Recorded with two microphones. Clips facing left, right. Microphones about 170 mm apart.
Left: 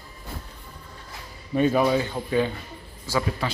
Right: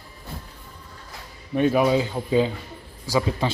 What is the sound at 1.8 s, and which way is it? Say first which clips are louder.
Speech: right 2 dB; 10° right (ahead or behind).